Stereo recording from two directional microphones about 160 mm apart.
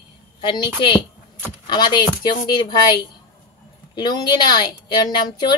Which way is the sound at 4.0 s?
25° left (ahead or behind).